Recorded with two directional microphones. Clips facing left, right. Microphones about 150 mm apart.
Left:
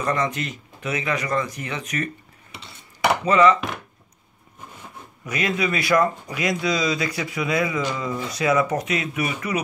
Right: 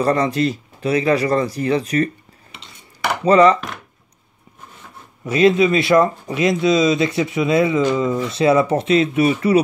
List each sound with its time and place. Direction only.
0.0 s speech: 35° right (ahead or behind)
3.3 s speech: 35° right (ahead or behind)
5.2 s speech: 30° right (ahead or behind)